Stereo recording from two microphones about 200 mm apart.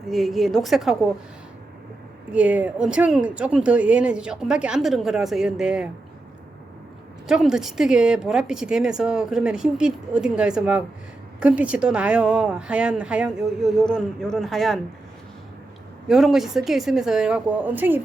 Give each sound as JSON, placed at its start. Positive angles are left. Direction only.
{"t": 0.1, "sound": "a woman's voice", "side_deg": 0}
{"t": 2.3, "sound": "a woman's voice", "side_deg": -5}
{"t": 7.3, "sound": "a woman's voice", "side_deg": -5}
{"t": 16.0, "sound": "a woman's voice", "side_deg": 0}